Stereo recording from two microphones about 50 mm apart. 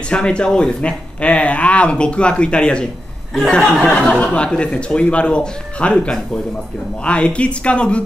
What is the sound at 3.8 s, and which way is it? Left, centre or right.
A man's voice, centre.